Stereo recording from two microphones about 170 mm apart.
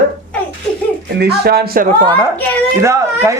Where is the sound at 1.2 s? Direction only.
70° right (ahead or behind).